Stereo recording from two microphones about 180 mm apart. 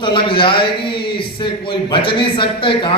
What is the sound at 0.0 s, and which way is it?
A man's voice, 30° left (ahead or behind).